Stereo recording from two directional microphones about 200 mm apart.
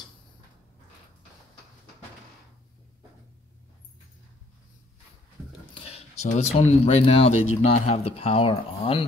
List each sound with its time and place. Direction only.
5.8 s speech: 30° left (ahead or behind)